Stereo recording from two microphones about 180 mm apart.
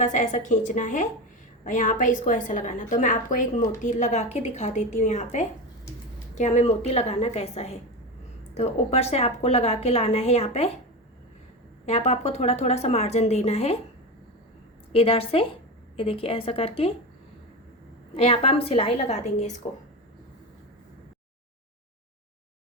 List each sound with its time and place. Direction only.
0.0 s a woman's voice: 40° left (ahead or behind)
11.9 s a woman's voice: 35° left (ahead or behind)
14.9 s a woman's voice: 30° left (ahead or behind)
18.2 s a woman's voice: 35° left (ahead or behind)